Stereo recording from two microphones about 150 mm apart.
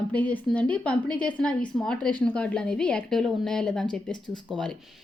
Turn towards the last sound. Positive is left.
turn(degrees=5)  # may be behind; listen again after turning